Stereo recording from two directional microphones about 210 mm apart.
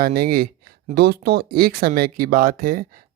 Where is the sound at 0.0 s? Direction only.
45° right (ahead or behind).